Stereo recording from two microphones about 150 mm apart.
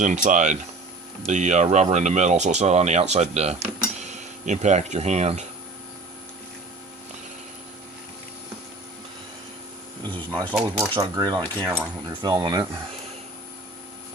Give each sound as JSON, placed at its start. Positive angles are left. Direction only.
{"t": 0.0, "sound": "speech", "side_deg": -55}
{"t": 10.5, "sound": "speech", "side_deg": -5}
{"t": 10.9, "sound": "keys jangling", "side_deg": -25}